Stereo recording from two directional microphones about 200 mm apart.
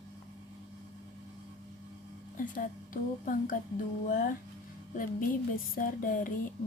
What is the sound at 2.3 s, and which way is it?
A woman's voice, 45° left (ahead or behind).